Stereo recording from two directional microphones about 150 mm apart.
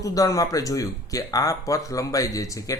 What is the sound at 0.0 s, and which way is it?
A man's voice, 25° left (ahead or behind).